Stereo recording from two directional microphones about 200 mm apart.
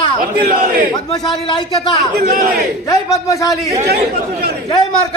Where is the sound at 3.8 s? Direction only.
50° right (ahead or behind).